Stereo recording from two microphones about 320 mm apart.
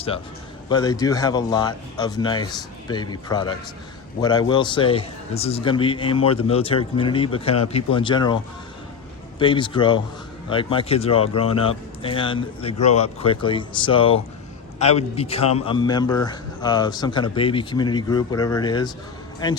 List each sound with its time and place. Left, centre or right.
0.7 s a man's voice: centre
9.4 s a man's voice: centre